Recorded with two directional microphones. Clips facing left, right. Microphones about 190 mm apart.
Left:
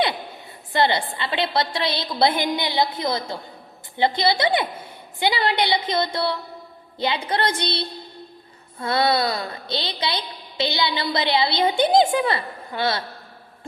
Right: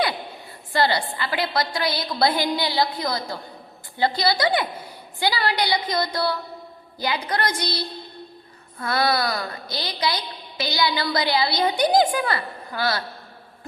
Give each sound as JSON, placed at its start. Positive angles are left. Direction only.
{"t": 0.7, "sound": "a woman's voice", "side_deg": 20}